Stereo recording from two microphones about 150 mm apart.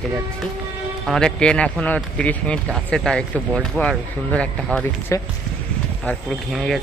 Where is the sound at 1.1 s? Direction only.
5° left (ahead or behind).